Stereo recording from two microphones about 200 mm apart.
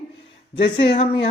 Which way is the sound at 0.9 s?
25° left (ahead or behind).